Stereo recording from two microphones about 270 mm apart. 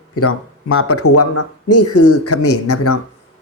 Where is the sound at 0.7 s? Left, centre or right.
Left.